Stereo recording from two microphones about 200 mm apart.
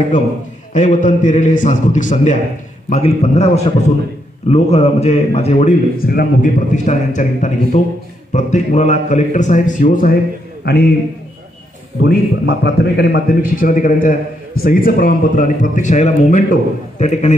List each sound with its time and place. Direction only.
0.7 s a man's voice: 40° left (ahead or behind)
10.6 s a man's voice: 50° left (ahead or behind)
12.0 s a man's voice: 55° left (ahead or behind); by 17.4 s 35° left (ahead or behind)